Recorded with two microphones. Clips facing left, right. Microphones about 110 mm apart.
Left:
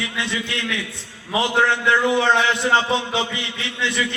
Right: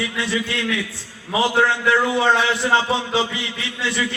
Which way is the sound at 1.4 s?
20° left (ahead or behind).